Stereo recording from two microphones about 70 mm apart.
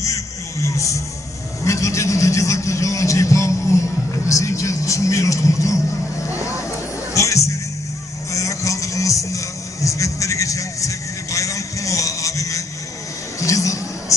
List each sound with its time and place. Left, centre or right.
0.0 s a sound: left
4.3 s speech: left
7.2 s music: left
9.8 s vehicle: left
13.4 s music: left